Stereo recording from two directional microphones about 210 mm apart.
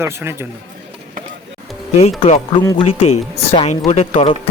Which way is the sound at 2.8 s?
30° left (ahead or behind).